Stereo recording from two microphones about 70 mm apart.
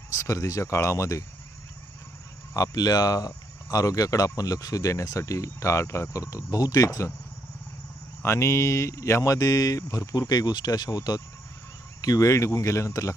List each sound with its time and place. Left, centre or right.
0.1 s speech: left
2.6 s speech: left
8.2 s speech: left
12.0 s speech: left